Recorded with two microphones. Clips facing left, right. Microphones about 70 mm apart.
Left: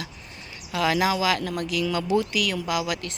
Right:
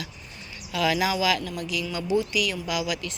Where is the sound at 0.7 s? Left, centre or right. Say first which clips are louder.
Left 2 dB; left.